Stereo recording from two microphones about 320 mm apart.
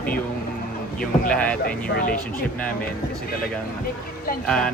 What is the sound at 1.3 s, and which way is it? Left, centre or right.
Speech, centre.